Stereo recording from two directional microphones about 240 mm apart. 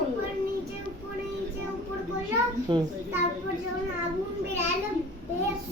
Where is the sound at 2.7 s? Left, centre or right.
Centre.